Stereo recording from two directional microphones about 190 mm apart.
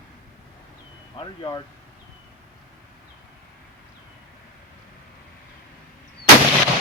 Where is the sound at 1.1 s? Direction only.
25° left (ahead or behind).